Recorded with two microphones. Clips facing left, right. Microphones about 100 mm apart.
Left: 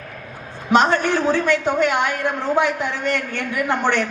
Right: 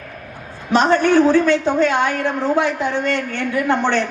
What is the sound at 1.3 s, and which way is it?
A woman's voice, 30° right (ahead or behind).